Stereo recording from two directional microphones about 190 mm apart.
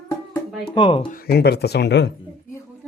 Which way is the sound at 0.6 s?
25° left (ahead or behind).